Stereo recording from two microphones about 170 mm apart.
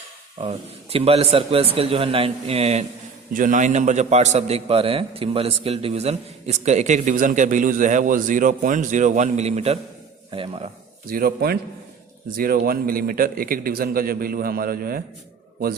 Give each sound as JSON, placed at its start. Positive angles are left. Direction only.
{"t": 0.4, "sound": "a man's voice", "side_deg": -35}
{"t": 3.3, "sound": "a man's voice", "side_deg": -50}
{"t": 11.1, "sound": "a man's voice", "side_deg": -65}